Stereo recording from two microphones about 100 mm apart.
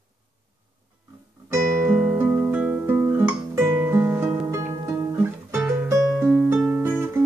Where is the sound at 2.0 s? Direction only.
15° right (ahead or behind).